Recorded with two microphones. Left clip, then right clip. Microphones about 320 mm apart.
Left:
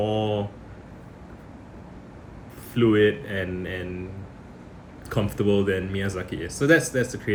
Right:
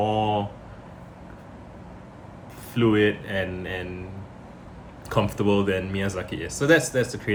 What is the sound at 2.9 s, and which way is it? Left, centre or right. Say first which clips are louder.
Speech: left 2 dB; centre.